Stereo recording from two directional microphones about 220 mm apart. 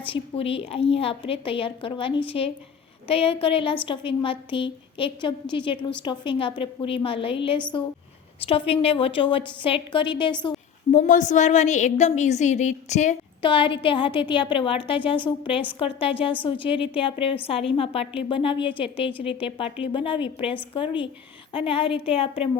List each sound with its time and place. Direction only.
0.1 s a woman's voice: 25° left (ahead or behind)
10.9 s a woman's voice: 35° left (ahead or behind)
13.4 s a woman's voice: 20° left (ahead or behind)